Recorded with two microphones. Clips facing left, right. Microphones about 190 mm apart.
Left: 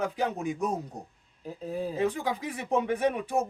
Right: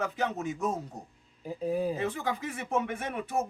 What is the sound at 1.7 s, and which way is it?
Speech, 10° right (ahead or behind).